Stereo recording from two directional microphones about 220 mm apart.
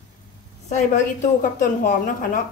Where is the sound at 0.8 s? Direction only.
35° left (ahead or behind).